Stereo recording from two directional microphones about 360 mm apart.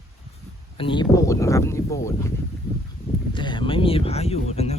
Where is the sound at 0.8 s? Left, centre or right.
Centre.